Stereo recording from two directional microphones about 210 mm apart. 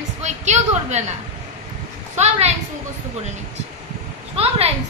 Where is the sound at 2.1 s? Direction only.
30° right (ahead or behind).